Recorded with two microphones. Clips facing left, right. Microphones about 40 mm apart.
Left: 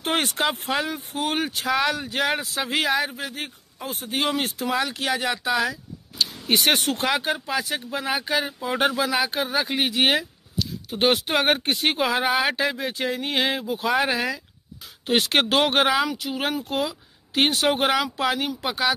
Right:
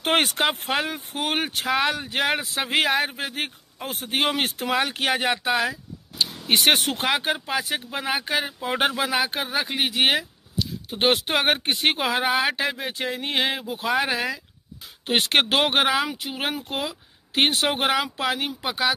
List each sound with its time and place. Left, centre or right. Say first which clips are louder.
0.0 s speech: right 3 dB; right
0.4 s a man's voice: right 1 dB; right
1.7 s speech: even; right
2.7 s a man's voice: right 1 dB; right
5.6 s a sound: even; centre
7.1 s speech: right 2 dB; centre
10.9 s speech: left 1 dB; centre
15.0 s speech: even; centre
16.1 s speech: left 2 dB; right; by 18.9 s centre